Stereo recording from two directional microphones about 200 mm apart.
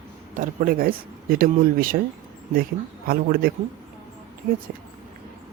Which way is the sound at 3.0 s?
50° right (ahead or behind).